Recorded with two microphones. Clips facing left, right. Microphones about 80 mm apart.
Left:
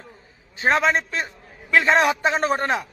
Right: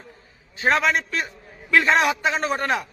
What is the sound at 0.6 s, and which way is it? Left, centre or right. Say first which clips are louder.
A man's voice: left 1 dB; left.